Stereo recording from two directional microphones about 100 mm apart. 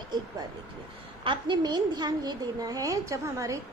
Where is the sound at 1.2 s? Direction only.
55° right (ahead or behind).